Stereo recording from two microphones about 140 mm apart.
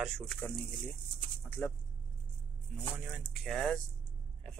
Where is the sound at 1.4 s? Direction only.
10° left (ahead or behind).